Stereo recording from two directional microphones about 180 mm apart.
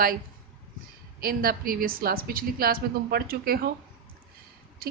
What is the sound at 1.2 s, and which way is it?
A woman's voice, 55° right (ahead or behind).